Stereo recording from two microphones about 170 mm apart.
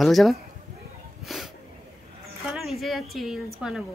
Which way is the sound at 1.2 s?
Centre (ahead or behind).